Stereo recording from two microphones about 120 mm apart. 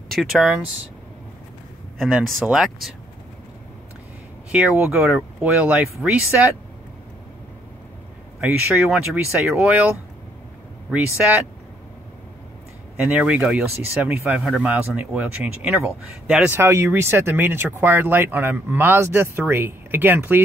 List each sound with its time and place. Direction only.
0.1 s speech: centre (ahead or behind)
2.0 s speech: 5° right (ahead or behind)
4.5 s speech: 10° right (ahead or behind)
8.4 s speech: 15° right (ahead or behind)
12.9 s speech: 15° right (ahead or behind)